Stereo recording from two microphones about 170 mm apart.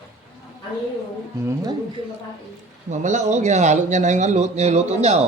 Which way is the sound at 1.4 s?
20° right (ahead or behind).